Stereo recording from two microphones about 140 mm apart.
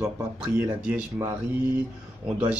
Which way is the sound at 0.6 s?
5° right (ahead or behind).